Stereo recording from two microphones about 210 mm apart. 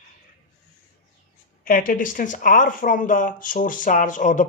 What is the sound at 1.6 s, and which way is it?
Speech, 40° left (ahead or behind).